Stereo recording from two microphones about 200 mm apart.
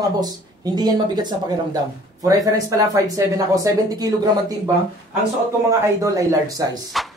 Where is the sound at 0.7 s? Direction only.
20° right (ahead or behind).